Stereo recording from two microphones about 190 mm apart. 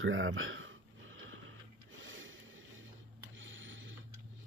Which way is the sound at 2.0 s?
90° right.